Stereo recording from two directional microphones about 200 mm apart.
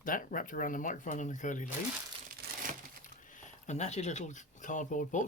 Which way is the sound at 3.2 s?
40° left (ahead or behind).